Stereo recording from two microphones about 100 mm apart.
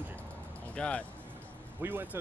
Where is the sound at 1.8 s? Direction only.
20° right (ahead or behind).